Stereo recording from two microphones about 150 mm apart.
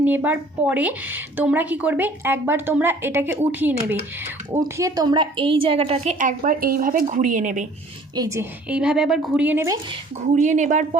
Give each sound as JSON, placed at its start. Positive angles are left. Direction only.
{"t": 0.0, "sound": "a woman's voice", "side_deg": -10}
{"t": 4.6, "sound": "a woman's voice", "side_deg": -25}
{"t": 8.1, "sound": "a woman's voice", "side_deg": -25}
{"t": 8.7, "sound": "a woman's voice", "side_deg": -5}
{"t": 10.3, "sound": "a woman's voice", "side_deg": -55}